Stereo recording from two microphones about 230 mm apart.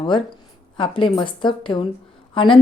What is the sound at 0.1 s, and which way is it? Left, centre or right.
Speech, left.